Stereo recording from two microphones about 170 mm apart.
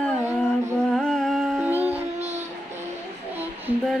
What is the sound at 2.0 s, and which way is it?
Music, 40° right (ahead or behind).